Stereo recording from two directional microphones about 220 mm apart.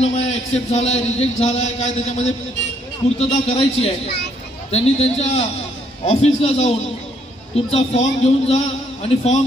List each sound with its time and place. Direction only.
0.0 s a man's voice: 30° left (ahead or behind)